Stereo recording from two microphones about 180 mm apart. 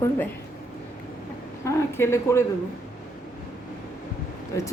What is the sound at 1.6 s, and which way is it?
Speech, 15° left (ahead or behind).